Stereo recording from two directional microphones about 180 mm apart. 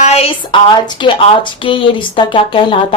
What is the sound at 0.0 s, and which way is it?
A woman's voice, 35° left (ahead or behind).